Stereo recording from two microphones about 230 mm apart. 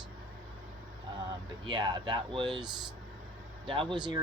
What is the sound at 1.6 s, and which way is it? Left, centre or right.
Speech, centre.